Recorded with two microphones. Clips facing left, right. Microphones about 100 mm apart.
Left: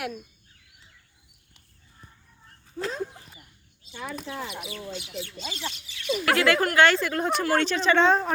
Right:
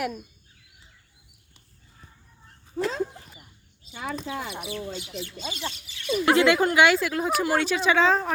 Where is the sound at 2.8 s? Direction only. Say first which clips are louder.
Right 4 dB; 90° right.